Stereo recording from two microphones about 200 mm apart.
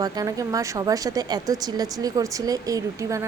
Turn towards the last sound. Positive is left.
turn(degrees=-15)  # may be behind; listen again after turning